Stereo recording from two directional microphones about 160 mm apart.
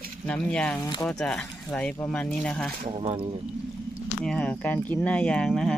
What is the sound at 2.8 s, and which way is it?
Speech, 35° right (ahead or behind).